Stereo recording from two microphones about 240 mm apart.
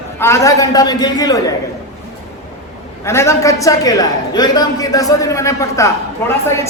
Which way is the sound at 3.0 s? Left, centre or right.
Centre.